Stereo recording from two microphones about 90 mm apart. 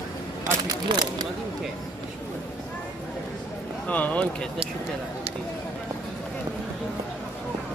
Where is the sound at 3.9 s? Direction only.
15° left (ahead or behind).